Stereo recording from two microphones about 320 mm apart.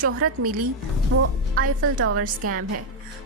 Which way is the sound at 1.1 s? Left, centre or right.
Right.